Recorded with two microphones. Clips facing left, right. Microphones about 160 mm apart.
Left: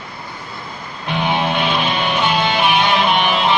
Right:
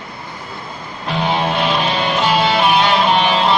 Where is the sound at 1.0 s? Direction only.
35° right (ahead or behind).